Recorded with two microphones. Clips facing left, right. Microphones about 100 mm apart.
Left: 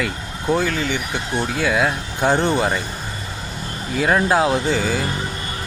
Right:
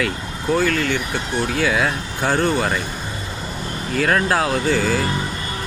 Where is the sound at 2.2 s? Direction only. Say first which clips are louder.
Left 1 dB; 25° left (ahead or behind).